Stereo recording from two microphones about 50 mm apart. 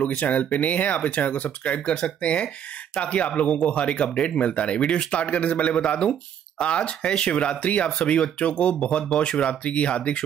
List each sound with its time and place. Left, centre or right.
0.0 s speech: left